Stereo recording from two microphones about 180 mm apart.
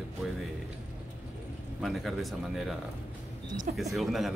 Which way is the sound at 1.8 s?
Centre (ahead or behind).